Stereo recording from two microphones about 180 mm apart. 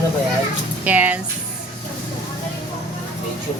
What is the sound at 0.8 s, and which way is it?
Speech, 10° right (ahead or behind).